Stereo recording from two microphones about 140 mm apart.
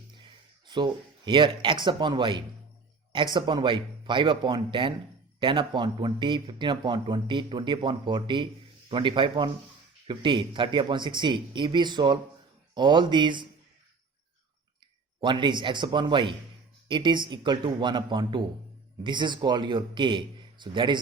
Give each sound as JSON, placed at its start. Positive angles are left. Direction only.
{"t": 0.7, "sound": "speech", "side_deg": -35}
{"t": 15.2, "sound": "speech", "side_deg": -35}